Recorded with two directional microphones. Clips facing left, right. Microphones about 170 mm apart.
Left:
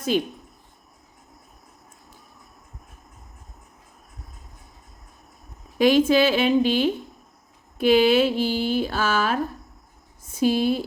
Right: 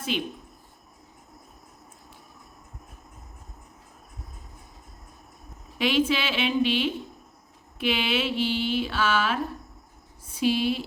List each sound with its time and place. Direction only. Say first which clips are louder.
0.1 s a woman's voice: left 7 dB; 40° left (ahead or behind)
5.7 s a woman's voice: left 7 dB; 45° left (ahead or behind)
10.4 s a woman's voice: left 4 dB; 40° left (ahead or behind)